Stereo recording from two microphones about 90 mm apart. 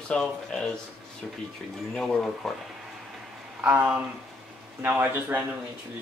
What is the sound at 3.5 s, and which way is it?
Speech, 20° right (ahead or behind).